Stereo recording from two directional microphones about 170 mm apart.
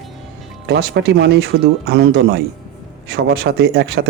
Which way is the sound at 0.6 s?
75° right (ahead or behind).